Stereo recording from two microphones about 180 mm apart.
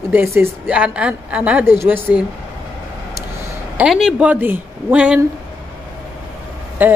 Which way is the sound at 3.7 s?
5° right (ahead or behind).